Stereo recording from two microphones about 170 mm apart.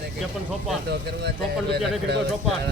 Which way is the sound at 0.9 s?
75° right (ahead or behind).